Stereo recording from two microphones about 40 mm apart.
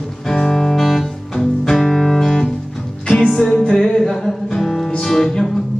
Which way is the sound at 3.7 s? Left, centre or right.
Centre.